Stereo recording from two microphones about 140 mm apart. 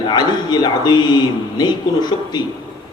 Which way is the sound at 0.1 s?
30° left (ahead or behind).